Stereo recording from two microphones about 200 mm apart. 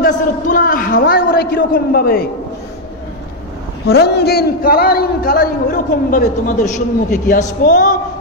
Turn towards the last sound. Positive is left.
turn(degrees=40)  # may be behind; listen again after turning